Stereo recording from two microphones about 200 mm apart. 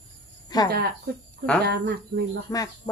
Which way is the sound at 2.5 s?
15° left (ahead or behind).